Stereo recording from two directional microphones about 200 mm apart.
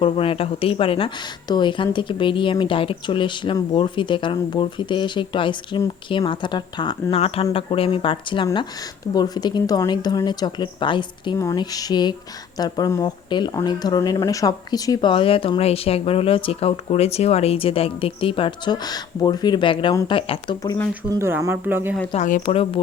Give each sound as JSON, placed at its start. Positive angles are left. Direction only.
{"t": 0.0, "sound": "speech", "side_deg": 30}
{"t": 21.2, "sound": "speech", "side_deg": -15}
{"t": 22.1, "sound": "speech", "side_deg": 35}